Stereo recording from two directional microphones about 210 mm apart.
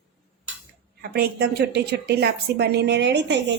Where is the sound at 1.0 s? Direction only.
50° right (ahead or behind).